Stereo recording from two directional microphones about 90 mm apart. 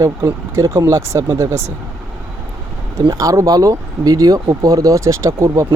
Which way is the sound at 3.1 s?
40° right (ahead or behind).